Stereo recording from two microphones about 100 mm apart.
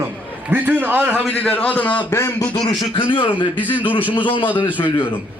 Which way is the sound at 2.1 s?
30° left (ahead or behind).